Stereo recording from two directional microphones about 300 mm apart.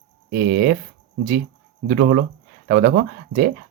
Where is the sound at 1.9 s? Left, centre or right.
Right.